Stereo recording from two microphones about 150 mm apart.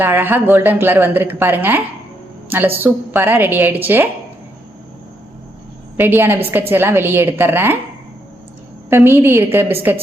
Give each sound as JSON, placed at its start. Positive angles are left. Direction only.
{"t": 0.0, "sound": "a woman's voice", "side_deg": -15}
{"t": 6.0, "sound": "a woman's voice", "side_deg": -15}
{"t": 8.9, "sound": "a woman's voice", "side_deg": -15}